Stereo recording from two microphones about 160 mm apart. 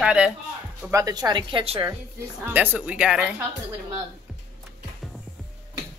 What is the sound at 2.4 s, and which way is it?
Speech, 10° right (ahead or behind).